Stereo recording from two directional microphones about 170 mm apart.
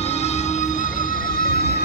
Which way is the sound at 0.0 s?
40° left (ahead or behind).